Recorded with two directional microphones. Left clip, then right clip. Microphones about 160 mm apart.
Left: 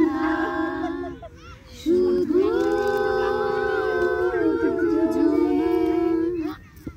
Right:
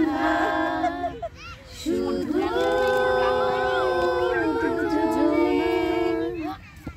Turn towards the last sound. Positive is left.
turn(degrees=-35)  # may be behind; listen again after turning